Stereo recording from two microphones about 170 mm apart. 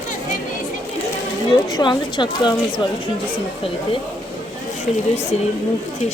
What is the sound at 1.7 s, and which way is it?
Speech, 25° left (ahead or behind).